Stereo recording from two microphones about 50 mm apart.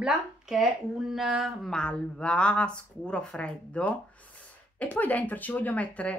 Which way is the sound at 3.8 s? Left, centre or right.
Left.